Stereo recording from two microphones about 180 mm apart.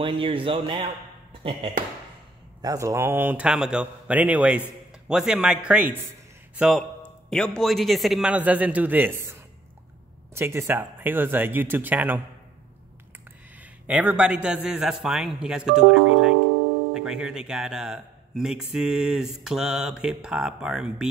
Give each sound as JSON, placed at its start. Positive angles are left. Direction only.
{"t": 0.0, "sound": "speech", "side_deg": -30}
{"t": 2.6, "sound": "a man's voice", "side_deg": -20}
{"t": 13.6, "sound": "speech", "side_deg": -10}